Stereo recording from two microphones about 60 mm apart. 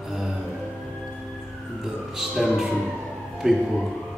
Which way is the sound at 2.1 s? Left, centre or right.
Centre.